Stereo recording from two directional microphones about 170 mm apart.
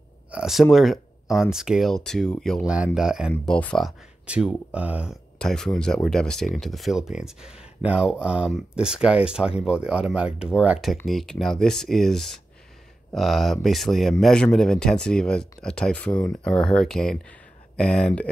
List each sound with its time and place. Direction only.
0.3 s speech: 5° right (ahead or behind)
5.4 s speech: 5° left (ahead or behind)